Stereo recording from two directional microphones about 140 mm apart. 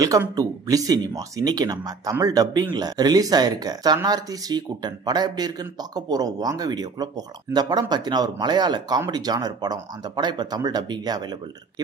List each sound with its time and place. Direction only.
0.4 s speech: 25° right (ahead or behind)